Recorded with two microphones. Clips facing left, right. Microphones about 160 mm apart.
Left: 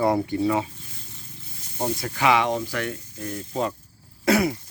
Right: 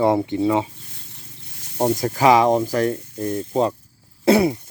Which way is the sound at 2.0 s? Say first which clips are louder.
Right 6 dB; 40° right (ahead or behind).